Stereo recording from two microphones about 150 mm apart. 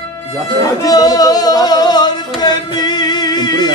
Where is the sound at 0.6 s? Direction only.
25° left (ahead or behind).